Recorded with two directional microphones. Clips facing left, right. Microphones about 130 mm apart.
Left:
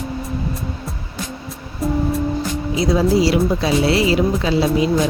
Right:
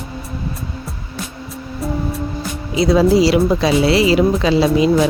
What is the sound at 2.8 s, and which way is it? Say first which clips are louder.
Speech: right 4 dB; 90° right.